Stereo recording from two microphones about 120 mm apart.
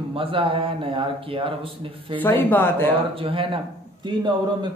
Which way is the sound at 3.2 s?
50° right (ahead or behind).